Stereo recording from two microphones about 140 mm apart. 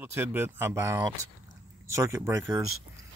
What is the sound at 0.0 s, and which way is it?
Speech, 15° right (ahead or behind).